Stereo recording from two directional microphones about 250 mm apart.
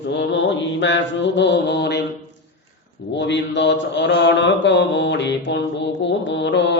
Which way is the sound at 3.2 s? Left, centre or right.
Left.